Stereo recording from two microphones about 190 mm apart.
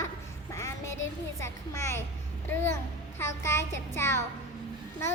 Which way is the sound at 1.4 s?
15° left (ahead or behind).